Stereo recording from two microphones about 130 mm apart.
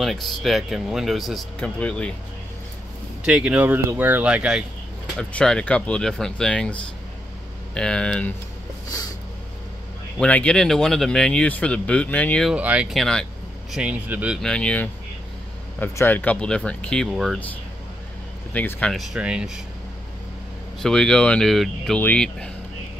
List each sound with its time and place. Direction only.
0.0 s speech: centre (ahead or behind)
3.3 s speech: 10° right (ahead or behind)
5.1 s speech: 5° left (ahead or behind)
10.2 s speech: 10° left (ahead or behind)
12.4 s speech: 10° right (ahead or behind)
12.9 s speech: 5° left (ahead or behind)
14.4 s speech: 5° left (ahead or behind)
18.5 s speech: 10° left (ahead or behind)
18.9 s speech: 5° right (ahead or behind)
20.8 s speech: 5° left (ahead or behind)